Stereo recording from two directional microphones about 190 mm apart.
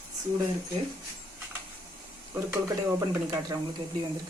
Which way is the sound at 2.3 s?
15° right (ahead or behind).